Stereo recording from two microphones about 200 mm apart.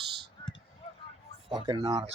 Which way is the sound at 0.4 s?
20° left (ahead or behind).